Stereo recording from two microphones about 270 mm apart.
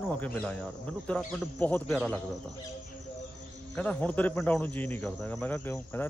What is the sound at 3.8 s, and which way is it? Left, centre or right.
Speech, centre.